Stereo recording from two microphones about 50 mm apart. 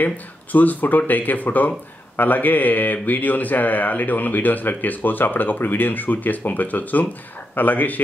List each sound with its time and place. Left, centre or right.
0.0 s speech: left